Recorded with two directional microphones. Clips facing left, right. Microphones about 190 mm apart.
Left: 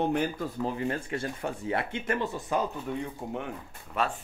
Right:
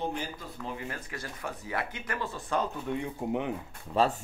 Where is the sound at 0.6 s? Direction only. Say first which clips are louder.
Left 7 dB; 30° left (ahead or behind); by 2.9 s 10° left (ahead or behind).